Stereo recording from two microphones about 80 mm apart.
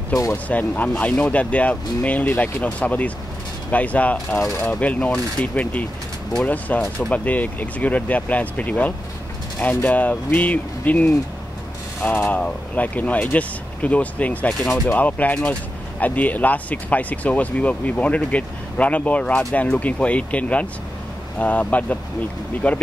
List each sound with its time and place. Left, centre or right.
0.5 s speech: centre